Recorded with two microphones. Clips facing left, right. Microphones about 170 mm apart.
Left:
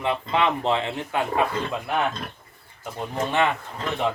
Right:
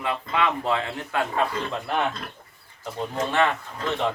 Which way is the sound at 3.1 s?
15° left (ahead or behind).